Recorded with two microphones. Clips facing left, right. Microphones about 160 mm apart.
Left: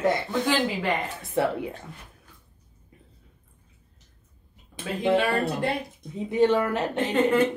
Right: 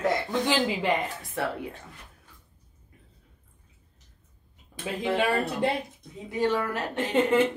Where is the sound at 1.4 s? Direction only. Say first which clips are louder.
Left 6 dB; 20° left (ahead or behind).